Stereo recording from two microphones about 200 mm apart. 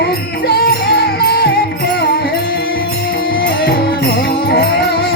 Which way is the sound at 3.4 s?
50° left (ahead or behind).